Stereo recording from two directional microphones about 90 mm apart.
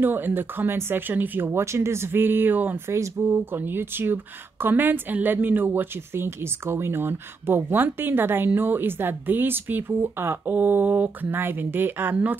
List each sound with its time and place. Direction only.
0.0 s speech: 25° right (ahead or behind)